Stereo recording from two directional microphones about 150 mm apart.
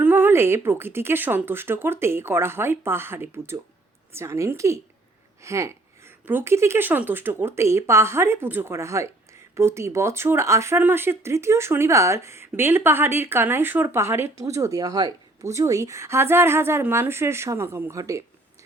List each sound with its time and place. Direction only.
0.0 s a woman's voice: 15° right (ahead or behind)